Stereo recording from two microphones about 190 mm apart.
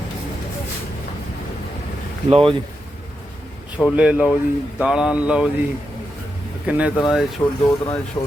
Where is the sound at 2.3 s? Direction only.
30° right (ahead or behind).